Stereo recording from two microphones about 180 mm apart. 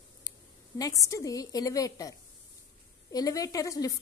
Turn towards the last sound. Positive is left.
turn(degrees=20)  # may be behind; listen again after turning